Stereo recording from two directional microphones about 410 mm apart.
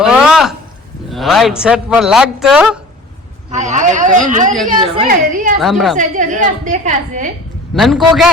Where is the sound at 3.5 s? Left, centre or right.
Centre.